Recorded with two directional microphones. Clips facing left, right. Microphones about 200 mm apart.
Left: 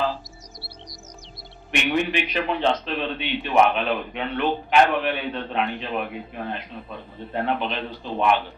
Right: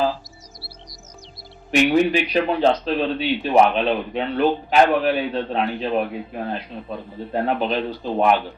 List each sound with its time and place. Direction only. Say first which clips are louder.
1.7 s speech: right 7 dB; 40° right (ahead or behind)